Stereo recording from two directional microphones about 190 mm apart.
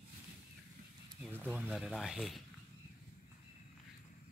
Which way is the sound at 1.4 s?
5° right (ahead or behind).